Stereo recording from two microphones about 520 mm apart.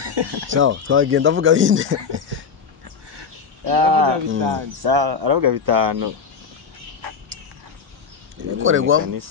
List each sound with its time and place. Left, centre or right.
0.0 s speech: right
0.5 s speech: right
3.2 s a sound: right
4.5 s speech: right
8.5 s speech: right